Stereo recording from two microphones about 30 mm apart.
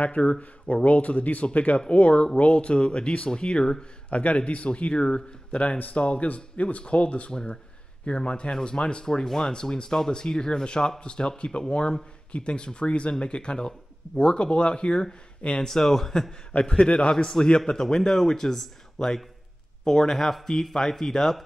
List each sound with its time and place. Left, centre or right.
0.2 s speech: left
0.8 s speech: left
4.1 s speech: left
4.6 s speech: left
15.6 s speech: centre
16.5 s speech: left; by 21.4 s centre